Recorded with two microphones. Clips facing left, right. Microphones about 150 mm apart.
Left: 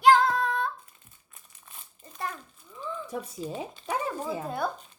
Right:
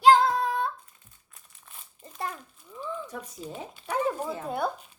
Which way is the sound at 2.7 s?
5° right (ahead or behind).